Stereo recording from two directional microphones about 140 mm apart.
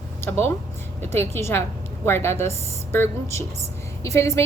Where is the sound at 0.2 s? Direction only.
20° left (ahead or behind).